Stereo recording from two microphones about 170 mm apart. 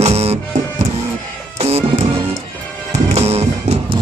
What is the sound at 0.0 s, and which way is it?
Music, 40° right (ahead or behind).